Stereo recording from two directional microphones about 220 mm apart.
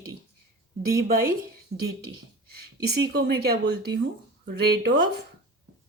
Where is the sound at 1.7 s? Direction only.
30° right (ahead or behind).